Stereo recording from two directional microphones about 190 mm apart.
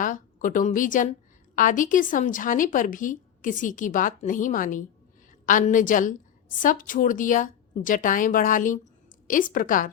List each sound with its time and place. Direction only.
0.0 s a woman's voice: 45° left (ahead or behind)